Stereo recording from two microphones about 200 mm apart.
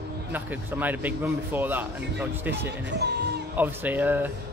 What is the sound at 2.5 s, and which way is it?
Speech, 60° right (ahead or behind).